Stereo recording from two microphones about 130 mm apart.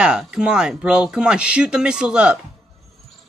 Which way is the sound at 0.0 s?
5° right (ahead or behind).